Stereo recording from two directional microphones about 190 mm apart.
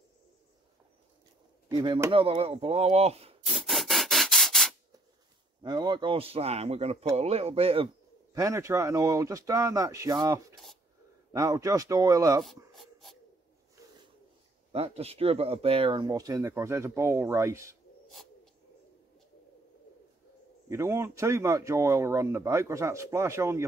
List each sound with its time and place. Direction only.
1.7 s speech: 25° right (ahead or behind)
3.4 s rub: centre (ahead or behind)
5.6 s speech: 20° right (ahead or behind)
8.4 s speech: 15° right (ahead or behind)
12.7 s dog: centre (ahead or behind)
14.7 s speech: 30° right (ahead or behind); by 17.7 s 15° right (ahead or behind)
18.1 s a sound: centre (ahead or behind)
20.6 s speech: 15° right (ahead or behind)